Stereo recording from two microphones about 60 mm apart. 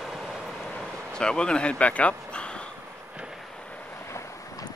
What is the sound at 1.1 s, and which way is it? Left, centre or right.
Speech, centre.